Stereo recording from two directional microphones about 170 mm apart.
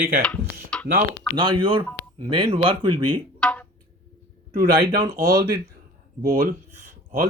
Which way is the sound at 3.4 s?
5° left (ahead or behind).